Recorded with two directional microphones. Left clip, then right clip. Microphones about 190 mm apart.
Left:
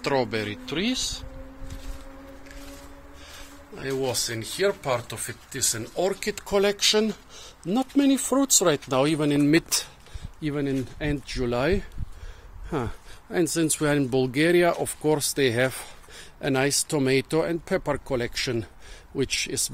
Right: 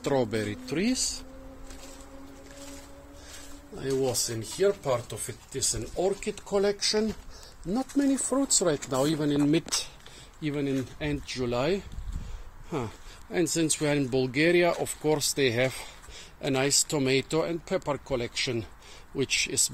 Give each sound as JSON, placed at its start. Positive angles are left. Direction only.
{"t": 0.0, "sound": "speech", "side_deg": -15}
{"t": 3.7, "sound": "speech", "side_deg": -15}